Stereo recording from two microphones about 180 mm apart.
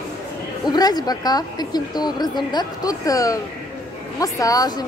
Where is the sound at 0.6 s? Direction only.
20° left (ahead or behind).